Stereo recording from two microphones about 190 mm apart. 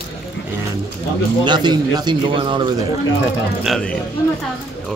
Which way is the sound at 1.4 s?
25° right (ahead or behind).